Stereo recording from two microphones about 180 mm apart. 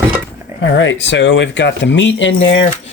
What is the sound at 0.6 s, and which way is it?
Speech, 90° left.